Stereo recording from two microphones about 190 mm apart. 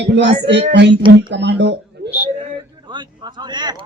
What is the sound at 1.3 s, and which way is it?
Speech, 65° right (ahead or behind).